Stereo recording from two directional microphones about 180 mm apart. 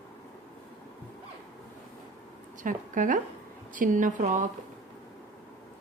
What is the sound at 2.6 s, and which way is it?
A woman's voice, 45° right (ahead or behind).